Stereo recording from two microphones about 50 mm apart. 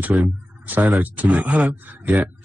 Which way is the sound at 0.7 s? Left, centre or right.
Right.